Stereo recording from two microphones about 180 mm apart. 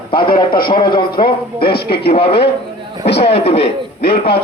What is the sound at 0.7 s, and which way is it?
A man's voice, 25° left (ahead or behind).